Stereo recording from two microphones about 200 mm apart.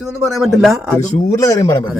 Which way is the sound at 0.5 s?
Centre (ahead or behind).